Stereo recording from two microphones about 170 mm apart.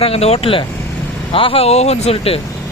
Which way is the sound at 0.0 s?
35° left (ahead or behind).